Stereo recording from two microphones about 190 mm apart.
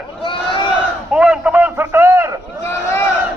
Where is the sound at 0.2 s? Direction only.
25° left (ahead or behind).